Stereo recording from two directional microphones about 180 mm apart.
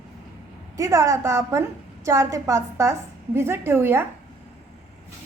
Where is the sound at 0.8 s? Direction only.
20° right (ahead or behind).